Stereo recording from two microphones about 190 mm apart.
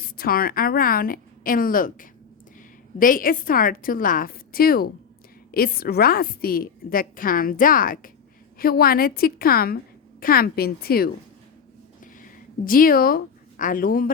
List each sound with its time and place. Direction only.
0.2 s a woman's voice: 50° left (ahead or behind)
12.2 s a woman's voice: 50° left (ahead or behind)